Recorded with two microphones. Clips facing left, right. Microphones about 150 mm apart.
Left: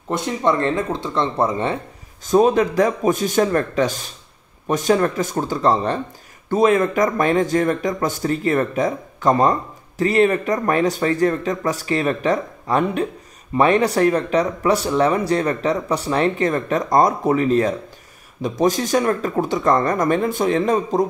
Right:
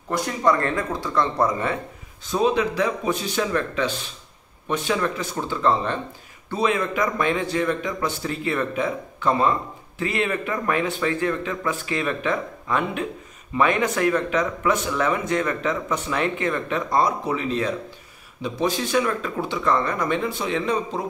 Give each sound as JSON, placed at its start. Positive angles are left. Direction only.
{"t": 0.1, "sound": "speech", "side_deg": 25}
{"t": 2.2, "sound": "speech", "side_deg": 45}